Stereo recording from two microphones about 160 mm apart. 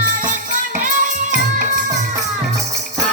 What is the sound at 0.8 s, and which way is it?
Music, 50° right (ahead or behind).